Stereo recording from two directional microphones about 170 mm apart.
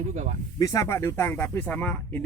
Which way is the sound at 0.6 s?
20° left (ahead or behind).